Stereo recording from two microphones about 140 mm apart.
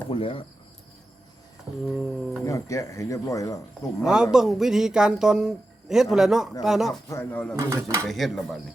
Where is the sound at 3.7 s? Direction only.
5° right (ahead or behind).